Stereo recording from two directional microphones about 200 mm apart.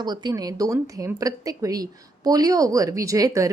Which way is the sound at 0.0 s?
20° right (ahead or behind).